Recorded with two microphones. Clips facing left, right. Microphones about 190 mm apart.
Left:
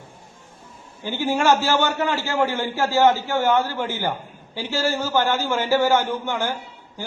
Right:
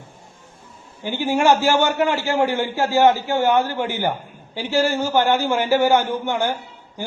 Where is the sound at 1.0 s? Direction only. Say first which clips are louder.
Right 2 dB; 15° right (ahead or behind).